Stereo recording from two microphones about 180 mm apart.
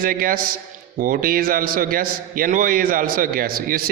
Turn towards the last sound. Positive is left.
turn(degrees=-55)  # may be behind; listen again after turning